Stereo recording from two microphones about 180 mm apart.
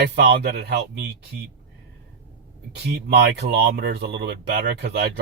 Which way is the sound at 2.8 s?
65° right (ahead or behind).